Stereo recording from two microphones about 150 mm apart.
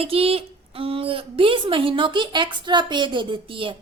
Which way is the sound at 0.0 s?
40° right (ahead or behind).